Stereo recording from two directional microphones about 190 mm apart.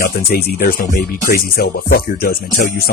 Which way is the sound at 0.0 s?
55° left (ahead or behind).